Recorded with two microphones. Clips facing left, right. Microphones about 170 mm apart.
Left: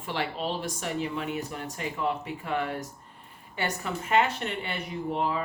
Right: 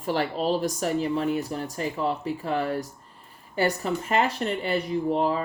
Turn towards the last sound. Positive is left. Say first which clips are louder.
# right 5 dB
turn(degrees=-35)  # may be behind; listen again after turning